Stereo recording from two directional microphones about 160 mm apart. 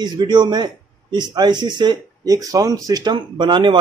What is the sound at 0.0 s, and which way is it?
A man's voice, 25° right (ahead or behind).